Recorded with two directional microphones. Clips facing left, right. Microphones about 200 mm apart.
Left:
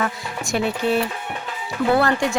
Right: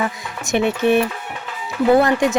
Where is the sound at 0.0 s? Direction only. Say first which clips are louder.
Right 1 dB; 20° right (ahead or behind).